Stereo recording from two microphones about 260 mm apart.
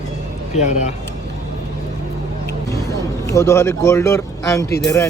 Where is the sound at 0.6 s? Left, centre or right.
Left.